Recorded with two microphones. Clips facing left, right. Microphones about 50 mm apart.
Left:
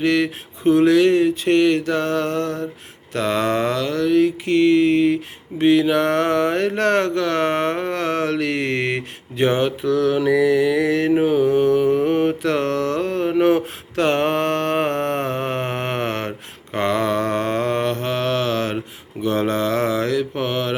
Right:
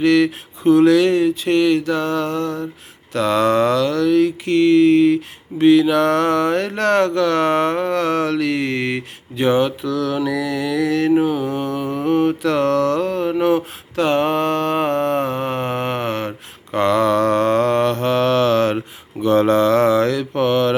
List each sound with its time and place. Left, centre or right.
0.0 s speech: left
3.1 s speech: left
12.0 s speech: left
13.4 s mantra: left
16.7 s mantra: left; by 20.7 s centre